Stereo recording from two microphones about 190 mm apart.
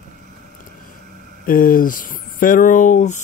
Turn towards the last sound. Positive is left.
turn(degrees=40)  # may be behind; listen again after turning